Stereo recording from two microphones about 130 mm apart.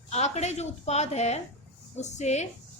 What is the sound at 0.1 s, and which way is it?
A woman's voice, 60° left (ahead or behind).